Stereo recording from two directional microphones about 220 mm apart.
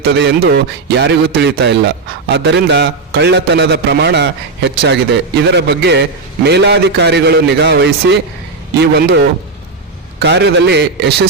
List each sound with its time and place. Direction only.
0.0 s speech: 50° right (ahead or behind)